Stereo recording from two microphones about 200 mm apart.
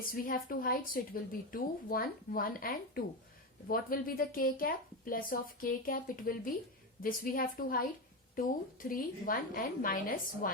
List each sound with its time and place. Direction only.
0.0 s a woman's voice: 45° left (ahead or behind)